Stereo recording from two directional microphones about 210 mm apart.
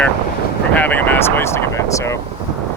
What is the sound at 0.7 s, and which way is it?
Vehicle, 5° left (ahead or behind).